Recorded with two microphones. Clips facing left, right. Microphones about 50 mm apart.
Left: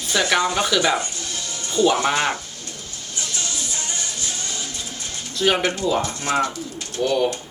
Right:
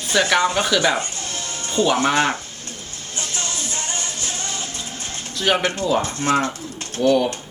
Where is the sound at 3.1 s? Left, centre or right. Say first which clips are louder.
Right 1 dB; right.